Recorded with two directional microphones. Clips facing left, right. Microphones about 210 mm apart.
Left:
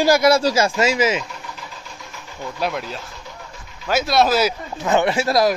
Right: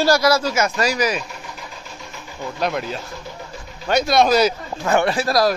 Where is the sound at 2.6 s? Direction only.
Centre (ahead or behind).